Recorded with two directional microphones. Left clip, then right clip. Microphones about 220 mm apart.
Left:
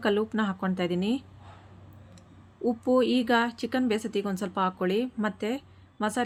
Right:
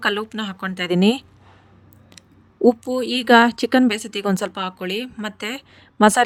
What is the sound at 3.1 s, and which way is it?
Speech, 50° right (ahead or behind).